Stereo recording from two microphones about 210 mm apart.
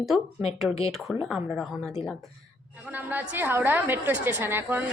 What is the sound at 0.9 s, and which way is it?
A woman's voice, centre (ahead or behind).